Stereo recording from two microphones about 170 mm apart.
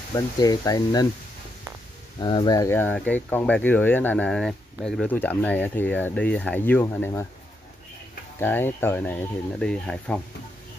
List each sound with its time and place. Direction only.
0.1 s speech: 20° left (ahead or behind)
2.1 s speech: 25° left (ahead or behind)
8.4 s speech: 10° left (ahead or behind)